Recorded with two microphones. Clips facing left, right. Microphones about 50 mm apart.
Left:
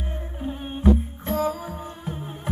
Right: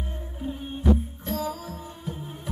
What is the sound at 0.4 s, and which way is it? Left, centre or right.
Music, left.